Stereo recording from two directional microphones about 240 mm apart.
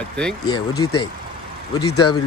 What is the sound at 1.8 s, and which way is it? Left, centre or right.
Speech, left.